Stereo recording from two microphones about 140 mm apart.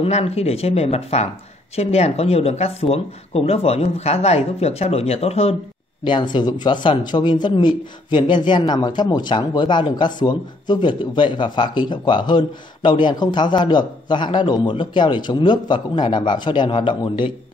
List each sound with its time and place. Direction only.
0.0 s speech: 50° left (ahead or behind)
6.0 s speech: 35° left (ahead or behind)